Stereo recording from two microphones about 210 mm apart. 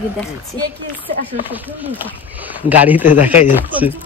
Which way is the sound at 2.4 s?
10° right (ahead or behind).